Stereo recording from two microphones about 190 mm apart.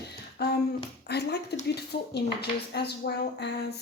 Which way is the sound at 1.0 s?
60° left (ahead or behind).